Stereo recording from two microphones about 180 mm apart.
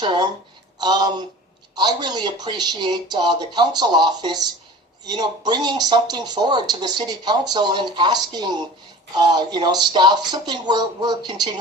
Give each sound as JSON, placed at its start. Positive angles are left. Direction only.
{"t": 0.0, "sound": "speech", "side_deg": -25}